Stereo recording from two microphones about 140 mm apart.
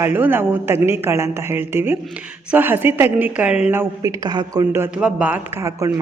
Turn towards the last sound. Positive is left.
turn(degrees=-20)  # may be behind; listen again after turning